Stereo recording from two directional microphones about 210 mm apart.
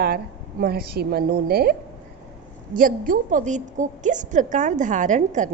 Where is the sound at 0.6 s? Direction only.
45° right (ahead or behind).